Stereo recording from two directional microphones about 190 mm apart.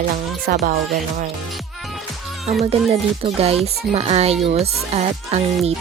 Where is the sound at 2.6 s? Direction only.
30° right (ahead or behind).